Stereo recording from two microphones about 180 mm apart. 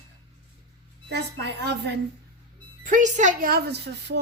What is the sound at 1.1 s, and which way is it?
Speech, 70° right (ahead or behind).